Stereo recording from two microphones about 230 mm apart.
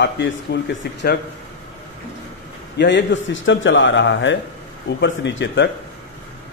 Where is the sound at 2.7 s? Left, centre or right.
Left.